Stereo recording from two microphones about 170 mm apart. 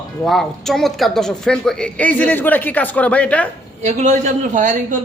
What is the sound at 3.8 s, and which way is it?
Speech, 45° right (ahead or behind).